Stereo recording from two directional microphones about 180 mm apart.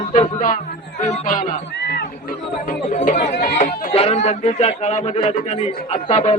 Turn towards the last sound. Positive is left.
turn(degrees=35)  # may be behind; listen again after turning